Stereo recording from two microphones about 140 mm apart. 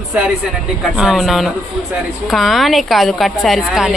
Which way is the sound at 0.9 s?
5° right (ahead or behind).